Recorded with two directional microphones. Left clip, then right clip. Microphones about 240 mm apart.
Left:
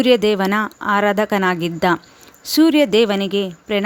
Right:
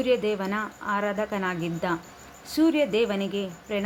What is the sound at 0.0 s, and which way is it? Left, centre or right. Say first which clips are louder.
A woman's voice: left 10 dB; left.